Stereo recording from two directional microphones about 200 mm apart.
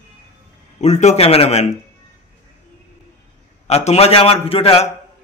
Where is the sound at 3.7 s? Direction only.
30° left (ahead or behind).